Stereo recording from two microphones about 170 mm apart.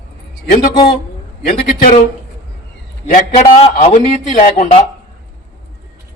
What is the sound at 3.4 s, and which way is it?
Speech, 40° left (ahead or behind).